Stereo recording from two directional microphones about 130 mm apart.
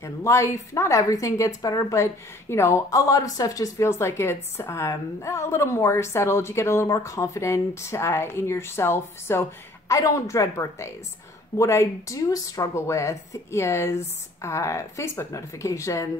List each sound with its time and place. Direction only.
0.0 s speech: 20° left (ahead or behind)